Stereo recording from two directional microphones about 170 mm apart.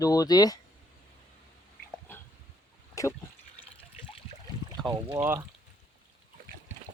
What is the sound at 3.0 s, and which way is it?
Speech, 20° left (ahead or behind).